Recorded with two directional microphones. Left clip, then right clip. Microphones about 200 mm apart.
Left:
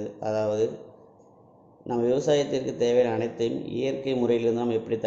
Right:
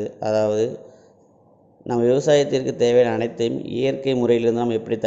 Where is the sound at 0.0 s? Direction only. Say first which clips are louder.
Right 7 dB; 25° right (ahead or behind).